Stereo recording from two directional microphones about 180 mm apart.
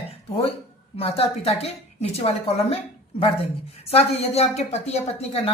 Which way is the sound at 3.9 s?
35° left (ahead or behind).